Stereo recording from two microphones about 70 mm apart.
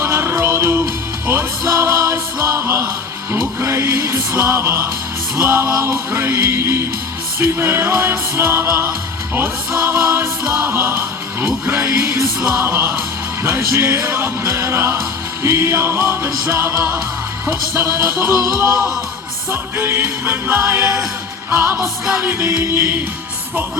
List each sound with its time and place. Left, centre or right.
0.0 s music: right
12.5 s music: right
19.5 s music: right
22.4 s music: right